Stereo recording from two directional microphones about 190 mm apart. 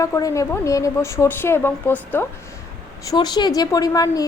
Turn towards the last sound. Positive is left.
turn(degrees=20)  # may be behind; listen again after turning